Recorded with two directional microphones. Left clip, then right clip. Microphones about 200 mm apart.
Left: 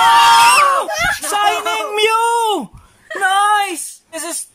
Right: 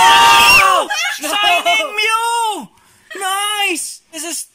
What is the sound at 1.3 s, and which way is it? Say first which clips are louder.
Speech: right 6 dB; 30° left (ahead or behind).